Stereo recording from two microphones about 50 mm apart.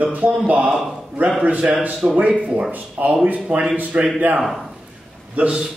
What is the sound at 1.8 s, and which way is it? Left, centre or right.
A man's voice, right.